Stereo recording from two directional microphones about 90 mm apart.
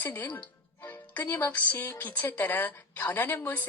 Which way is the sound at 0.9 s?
20° left (ahead or behind).